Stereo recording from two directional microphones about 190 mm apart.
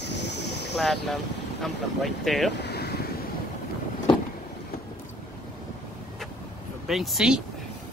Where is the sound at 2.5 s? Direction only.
60° left (ahead or behind).